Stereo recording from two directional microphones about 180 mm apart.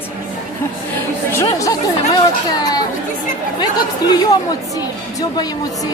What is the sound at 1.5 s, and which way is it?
Speech, 20° left (ahead or behind).